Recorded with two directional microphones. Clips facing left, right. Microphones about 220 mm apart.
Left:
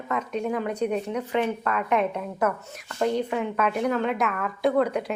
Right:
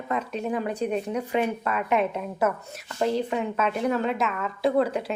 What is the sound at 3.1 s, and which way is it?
A woman's voice, 30° right (ahead or behind).